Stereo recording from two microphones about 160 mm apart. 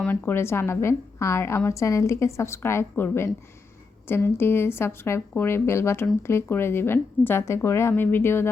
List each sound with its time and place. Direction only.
0.0 s a woman's voice: 10° left (ahead or behind)